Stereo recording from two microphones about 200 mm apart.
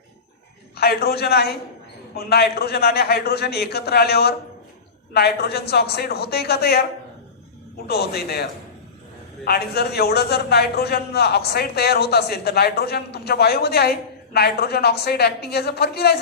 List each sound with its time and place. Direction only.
0.8 s a man's voice: 50° left (ahead or behind)
7.9 s a man's voice: 55° left (ahead or behind)